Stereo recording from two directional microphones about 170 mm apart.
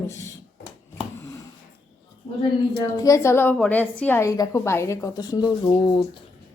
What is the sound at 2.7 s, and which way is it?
A woman's voice, 20° left (ahead or behind).